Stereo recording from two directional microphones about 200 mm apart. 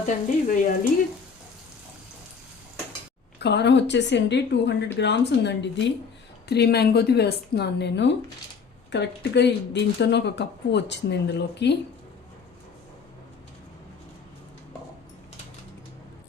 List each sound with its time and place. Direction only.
0.0 s frying: 40° left (ahead or behind)
3.3 s speech: 55° left (ahead or behind)